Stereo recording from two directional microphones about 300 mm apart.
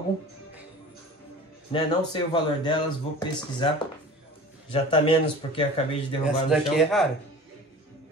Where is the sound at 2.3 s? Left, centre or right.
Centre.